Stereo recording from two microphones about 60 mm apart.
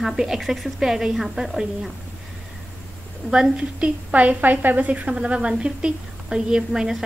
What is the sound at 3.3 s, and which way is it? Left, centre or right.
A woman's voice, centre.